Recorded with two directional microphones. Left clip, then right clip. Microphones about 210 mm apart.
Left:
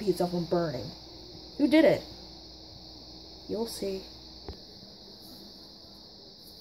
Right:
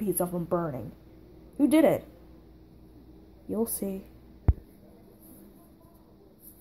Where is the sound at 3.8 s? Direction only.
25° right (ahead or behind).